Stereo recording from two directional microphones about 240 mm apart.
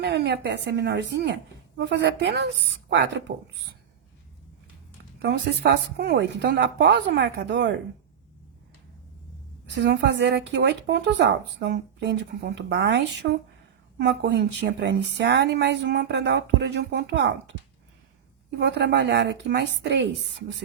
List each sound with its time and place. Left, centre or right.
0.0 s speech: right
5.2 s speech: right
9.7 s speech: right
18.6 s speech: right